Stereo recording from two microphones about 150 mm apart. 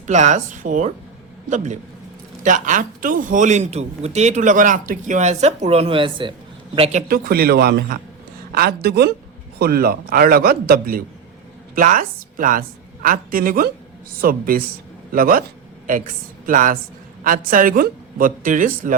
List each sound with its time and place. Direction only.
0.1 s a man's voice: 50° right (ahead or behind)
7.1 s a man's voice: 90° right
11.7 s a woman's voice: 65° right (ahead or behind)
15.9 s speech: 60° right (ahead or behind)